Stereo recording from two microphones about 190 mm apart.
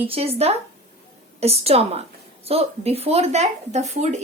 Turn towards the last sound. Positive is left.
turn(degrees=-35)  # may be behind; listen again after turning